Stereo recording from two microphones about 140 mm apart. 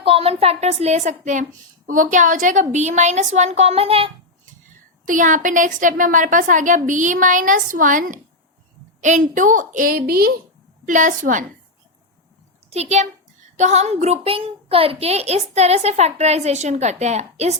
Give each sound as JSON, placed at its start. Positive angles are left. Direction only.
{"t": 0.0, "sound": "a woman's voice", "side_deg": -40}
{"t": 5.0, "sound": "a woman's voice", "side_deg": -70}
{"t": 10.8, "sound": "a woman's voice", "side_deg": -65}
{"t": 12.7, "sound": "a woman's voice", "side_deg": -50}